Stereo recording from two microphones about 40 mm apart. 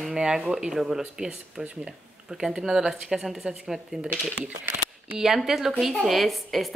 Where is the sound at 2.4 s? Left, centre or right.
Centre.